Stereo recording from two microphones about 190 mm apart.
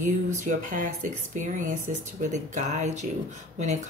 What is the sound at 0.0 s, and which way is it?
Speech, 40° right (ahead or behind).